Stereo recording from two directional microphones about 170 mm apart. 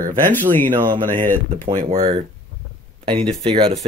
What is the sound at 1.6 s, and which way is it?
Speech, 35° right (ahead or behind).